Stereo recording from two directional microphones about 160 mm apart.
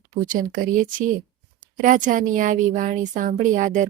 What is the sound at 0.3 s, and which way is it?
A woman's voice, 60° right (ahead or behind).